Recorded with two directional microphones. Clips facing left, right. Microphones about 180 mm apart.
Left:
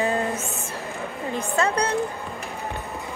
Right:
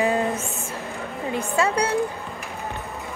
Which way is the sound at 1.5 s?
10° right (ahead or behind).